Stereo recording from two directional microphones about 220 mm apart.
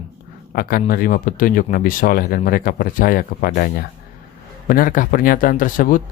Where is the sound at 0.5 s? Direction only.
40° left (ahead or behind).